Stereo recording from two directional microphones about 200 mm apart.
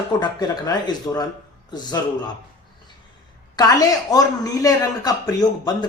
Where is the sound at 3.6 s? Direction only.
20° left (ahead or behind).